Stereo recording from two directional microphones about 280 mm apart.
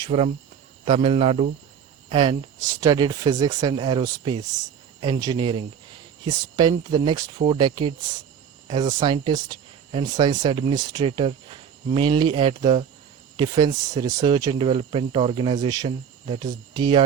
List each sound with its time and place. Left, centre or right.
0.0 s speech: right